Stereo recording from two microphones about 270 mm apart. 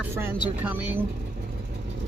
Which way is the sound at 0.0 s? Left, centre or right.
Centre.